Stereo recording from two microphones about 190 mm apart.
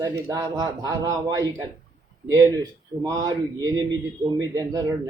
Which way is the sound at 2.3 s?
20° right (ahead or behind).